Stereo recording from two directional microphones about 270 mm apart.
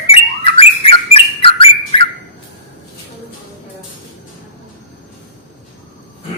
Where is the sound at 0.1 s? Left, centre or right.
Left.